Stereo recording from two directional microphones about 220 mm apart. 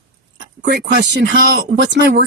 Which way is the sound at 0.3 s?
45° right (ahead or behind).